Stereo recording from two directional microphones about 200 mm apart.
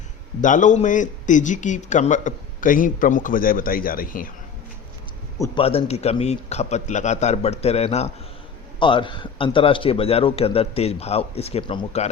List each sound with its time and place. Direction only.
0.4 s a man's voice: 40° left (ahead or behind)
5.5 s a man's voice: 30° left (ahead or behind)